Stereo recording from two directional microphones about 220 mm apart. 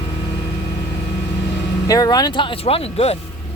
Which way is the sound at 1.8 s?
15° left (ahead or behind).